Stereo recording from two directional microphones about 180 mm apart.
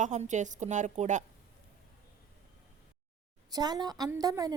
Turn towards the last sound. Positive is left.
turn(degrees=-20)  # may be behind; listen again after turning